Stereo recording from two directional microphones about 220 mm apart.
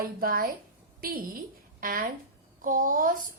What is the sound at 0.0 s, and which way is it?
A woman's voice, 40° right (ahead or behind).